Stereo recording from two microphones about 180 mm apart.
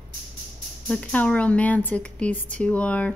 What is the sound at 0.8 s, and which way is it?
Speech, 5° left (ahead or behind).